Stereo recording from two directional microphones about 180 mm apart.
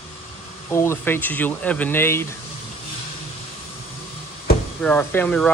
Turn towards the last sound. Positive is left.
turn(degrees=10)  # may be behind; listen again after turning